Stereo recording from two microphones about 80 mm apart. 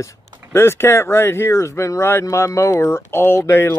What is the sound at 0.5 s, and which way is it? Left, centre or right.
Speech, left.